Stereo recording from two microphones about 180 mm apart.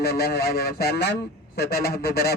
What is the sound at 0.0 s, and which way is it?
Speech, 60° left (ahead or behind).